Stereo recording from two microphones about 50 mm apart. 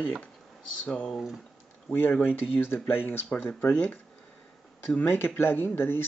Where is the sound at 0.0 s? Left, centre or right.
Left.